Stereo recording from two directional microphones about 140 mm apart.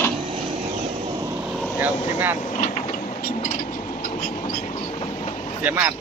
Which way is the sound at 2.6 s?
60° left (ahead or behind).